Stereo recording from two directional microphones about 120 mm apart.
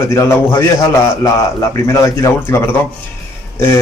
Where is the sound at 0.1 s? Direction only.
20° left (ahead or behind).